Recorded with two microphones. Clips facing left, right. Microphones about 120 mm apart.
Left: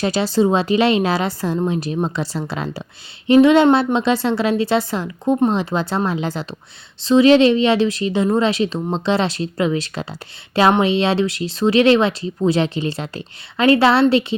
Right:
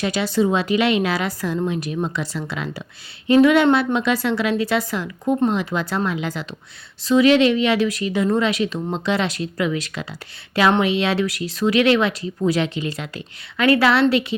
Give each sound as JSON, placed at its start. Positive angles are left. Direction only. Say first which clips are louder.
{"t": 0.0, "sound": "a woman's voice", "louder": "left 3 dB", "side_deg": 35}